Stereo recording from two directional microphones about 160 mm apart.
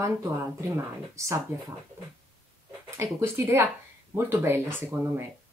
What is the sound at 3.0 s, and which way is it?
Speech, 15° right (ahead or behind).